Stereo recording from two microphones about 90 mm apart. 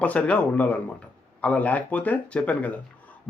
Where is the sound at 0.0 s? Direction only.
15° left (ahead or behind).